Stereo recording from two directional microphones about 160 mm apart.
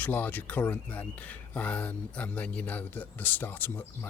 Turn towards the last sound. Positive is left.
turn(degrees=10)  # may be behind; listen again after turning